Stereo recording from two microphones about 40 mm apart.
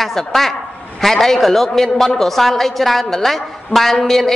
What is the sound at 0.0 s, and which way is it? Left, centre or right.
A woman's voice, centre.